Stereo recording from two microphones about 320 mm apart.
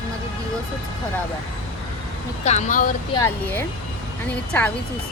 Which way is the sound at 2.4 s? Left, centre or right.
Left.